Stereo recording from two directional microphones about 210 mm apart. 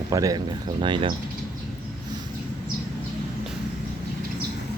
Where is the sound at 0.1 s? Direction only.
15° right (ahead or behind).